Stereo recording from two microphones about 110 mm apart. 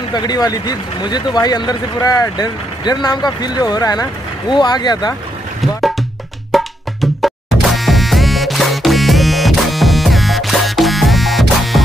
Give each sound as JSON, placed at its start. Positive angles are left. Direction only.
{"t": 0.1, "sound": "speech", "side_deg": 40}
{"t": 5.6, "sound": "music", "side_deg": 0}